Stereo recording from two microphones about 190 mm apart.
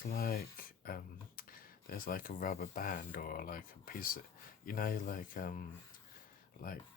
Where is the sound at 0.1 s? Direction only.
50° left (ahead or behind).